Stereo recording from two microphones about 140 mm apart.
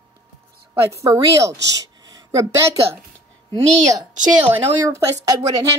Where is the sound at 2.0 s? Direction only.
25° right (ahead or behind).